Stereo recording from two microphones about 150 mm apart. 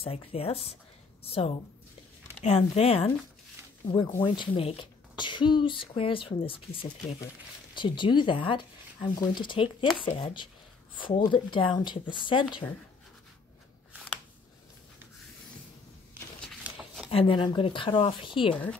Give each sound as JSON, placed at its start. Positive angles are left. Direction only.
{"t": 0.0, "sound": "a woman's voice", "side_deg": 40}
{"t": 16.6, "sound": "a sound", "side_deg": -5}
{"t": 17.1, "sound": "speech", "side_deg": 35}